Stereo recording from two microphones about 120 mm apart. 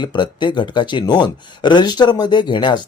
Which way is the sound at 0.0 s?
40° left (ahead or behind).